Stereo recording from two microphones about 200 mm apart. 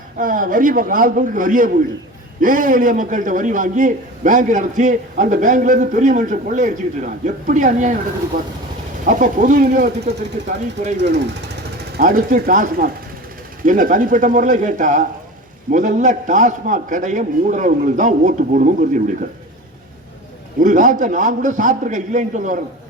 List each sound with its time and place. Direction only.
0.2 s a man's voice: 40° right (ahead or behind)
11.9 s a man's voice: 45° right (ahead or behind)
20.6 s a man's voice: 40° right (ahead or behind)